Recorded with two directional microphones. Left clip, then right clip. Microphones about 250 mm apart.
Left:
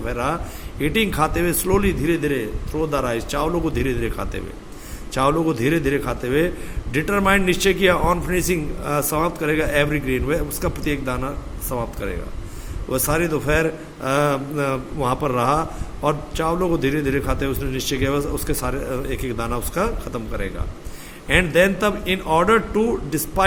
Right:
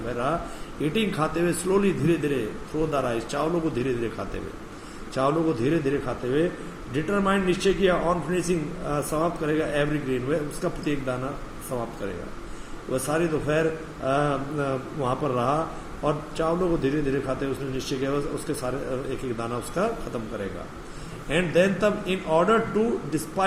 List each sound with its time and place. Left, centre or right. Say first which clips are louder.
0.8 s a man's voice: left 6 dB; left
5.1 s a man's voice: left 4 dB; left
12.9 s a man's voice: left 4 dB; left
21.2 s a man's voice: left 6 dB; left